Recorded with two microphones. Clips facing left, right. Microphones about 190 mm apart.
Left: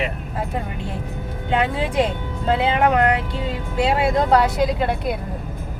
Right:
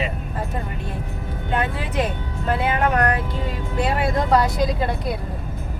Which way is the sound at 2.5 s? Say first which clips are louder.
Left 3 dB; 20° left (ahead or behind).